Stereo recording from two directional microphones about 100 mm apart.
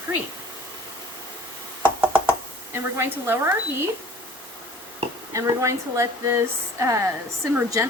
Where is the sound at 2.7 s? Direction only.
25° right (ahead or behind).